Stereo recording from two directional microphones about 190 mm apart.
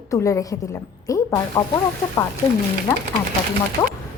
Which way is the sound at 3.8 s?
20° left (ahead or behind).